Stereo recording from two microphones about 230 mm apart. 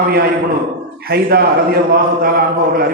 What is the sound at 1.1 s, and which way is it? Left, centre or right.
A man's voice, right.